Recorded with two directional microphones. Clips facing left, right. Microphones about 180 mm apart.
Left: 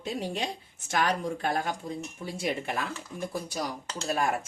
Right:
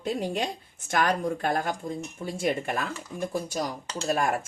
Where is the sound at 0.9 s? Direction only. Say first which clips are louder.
Right 3 dB; 55° right (ahead or behind).